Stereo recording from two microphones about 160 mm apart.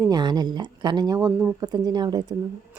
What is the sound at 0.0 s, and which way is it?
Speech, 25° right (ahead or behind).